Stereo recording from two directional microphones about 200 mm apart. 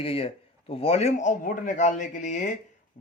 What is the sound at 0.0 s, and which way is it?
Speech, 30° left (ahead or behind).